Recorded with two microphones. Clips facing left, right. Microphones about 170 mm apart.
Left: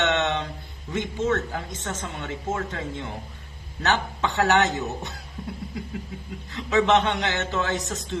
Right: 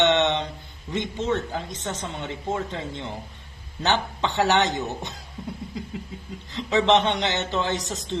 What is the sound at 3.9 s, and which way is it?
Speech, 30° right (ahead or behind).